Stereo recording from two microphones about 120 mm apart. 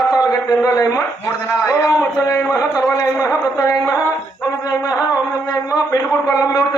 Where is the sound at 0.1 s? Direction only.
30° left (ahead or behind).